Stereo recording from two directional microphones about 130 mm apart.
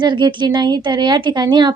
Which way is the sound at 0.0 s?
35° right (ahead or behind).